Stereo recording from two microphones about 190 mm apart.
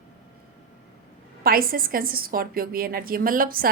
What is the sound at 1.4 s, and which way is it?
A woman's voice, 50° right (ahead or behind).